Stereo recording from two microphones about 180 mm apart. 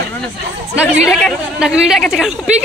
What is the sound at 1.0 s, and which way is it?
A woman's voice, centre (ahead or behind).